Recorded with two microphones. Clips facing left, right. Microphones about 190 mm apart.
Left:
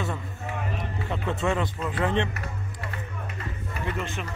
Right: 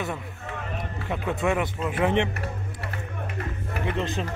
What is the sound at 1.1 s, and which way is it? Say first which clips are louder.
Speech: right 2 dB; 15° right (ahead or behind).